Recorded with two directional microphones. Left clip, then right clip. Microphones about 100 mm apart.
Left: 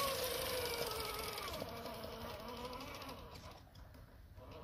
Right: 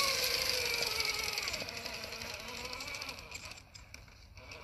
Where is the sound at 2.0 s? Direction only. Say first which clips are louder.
Right 5 dB; 15° left (ahead or behind).